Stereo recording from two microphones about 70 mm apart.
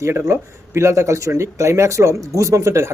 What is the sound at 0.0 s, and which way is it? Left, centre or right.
Speech, right.